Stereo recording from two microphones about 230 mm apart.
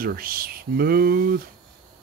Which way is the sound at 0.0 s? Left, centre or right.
Right.